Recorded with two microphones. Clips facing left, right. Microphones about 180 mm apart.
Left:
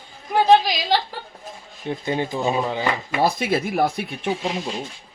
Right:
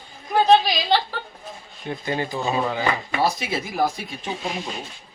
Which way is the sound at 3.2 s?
55° left (ahead or behind).